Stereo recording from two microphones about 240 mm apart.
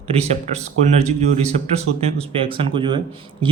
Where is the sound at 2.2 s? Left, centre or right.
Right.